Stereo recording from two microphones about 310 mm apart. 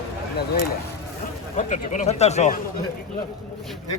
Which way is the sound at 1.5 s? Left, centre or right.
Left.